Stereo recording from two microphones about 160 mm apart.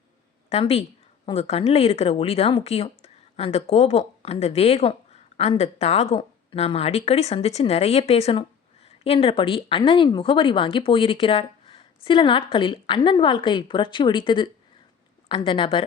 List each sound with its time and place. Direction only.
0.5 s speech: 40° left (ahead or behind)